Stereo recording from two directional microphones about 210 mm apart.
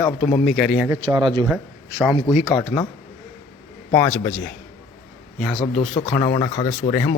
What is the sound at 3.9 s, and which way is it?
Speech, 5° left (ahead or behind).